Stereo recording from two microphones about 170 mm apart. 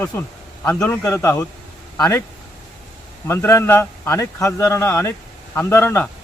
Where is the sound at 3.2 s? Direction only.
15° left (ahead or behind).